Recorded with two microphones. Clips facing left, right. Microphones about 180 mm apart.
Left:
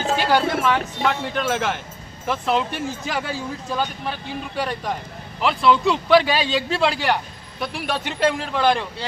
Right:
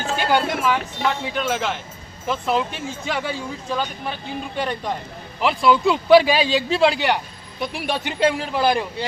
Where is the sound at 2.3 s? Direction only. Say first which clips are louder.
Even; centre (ahead or behind).